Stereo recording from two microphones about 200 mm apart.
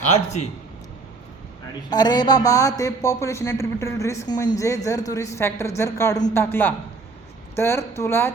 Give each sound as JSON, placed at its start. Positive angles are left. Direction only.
{"t": 0.0, "sound": "a man's voice", "side_deg": 35}
{"t": 1.9, "sound": "speech", "side_deg": 20}